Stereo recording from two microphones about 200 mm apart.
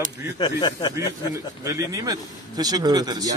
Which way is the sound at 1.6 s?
15° right (ahead or behind).